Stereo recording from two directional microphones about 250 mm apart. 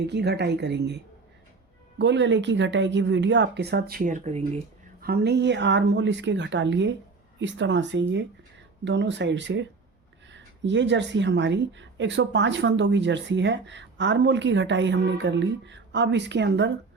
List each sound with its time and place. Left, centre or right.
0.1 s speech: right
5.0 s speech: right